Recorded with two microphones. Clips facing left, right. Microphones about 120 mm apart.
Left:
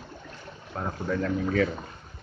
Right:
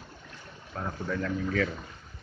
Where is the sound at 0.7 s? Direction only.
30° left (ahead or behind).